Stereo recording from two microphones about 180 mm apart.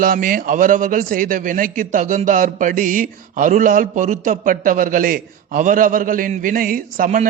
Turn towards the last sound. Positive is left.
turn(degrees=-50)  # may be behind; listen again after turning